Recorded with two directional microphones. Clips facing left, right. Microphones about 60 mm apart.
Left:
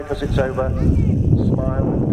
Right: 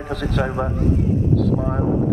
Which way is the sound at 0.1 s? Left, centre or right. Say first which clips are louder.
Left 2 dB; centre.